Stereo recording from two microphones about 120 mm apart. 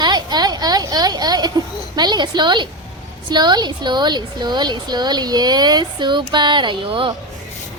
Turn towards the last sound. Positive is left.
turn(degrees=-45)  # may be behind; listen again after turning